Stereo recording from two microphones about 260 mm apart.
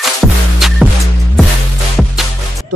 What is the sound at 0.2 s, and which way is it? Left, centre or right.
Music, centre.